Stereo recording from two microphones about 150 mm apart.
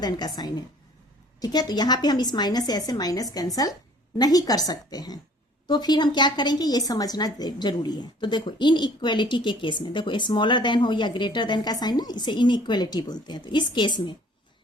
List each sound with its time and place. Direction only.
0.0 s a woman's voice: 25° left (ahead or behind)